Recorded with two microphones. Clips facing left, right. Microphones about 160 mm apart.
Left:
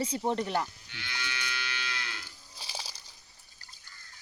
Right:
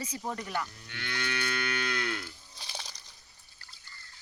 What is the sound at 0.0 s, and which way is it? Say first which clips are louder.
Speech: left 7 dB; 30° left (ahead or behind).